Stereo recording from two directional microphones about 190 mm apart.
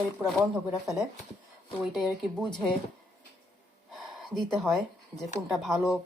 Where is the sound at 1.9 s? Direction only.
Centre (ahead or behind).